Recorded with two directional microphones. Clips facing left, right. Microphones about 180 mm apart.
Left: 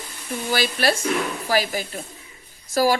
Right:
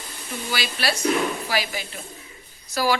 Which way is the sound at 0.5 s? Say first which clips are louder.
Left 6 dB; 45° left (ahead or behind).